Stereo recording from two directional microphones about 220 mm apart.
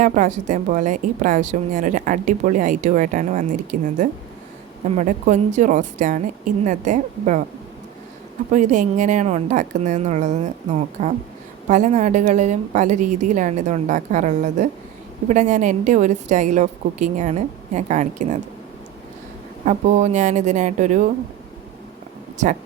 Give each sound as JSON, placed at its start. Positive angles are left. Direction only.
{"t": 0.0, "sound": "a woman's voice", "side_deg": -35}
{"t": 8.5, "sound": "a woman's voice", "side_deg": -35}
{"t": 19.6, "sound": "a woman's voice", "side_deg": -30}